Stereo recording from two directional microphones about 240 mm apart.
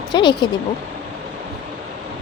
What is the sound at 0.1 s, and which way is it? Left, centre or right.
Speech, centre.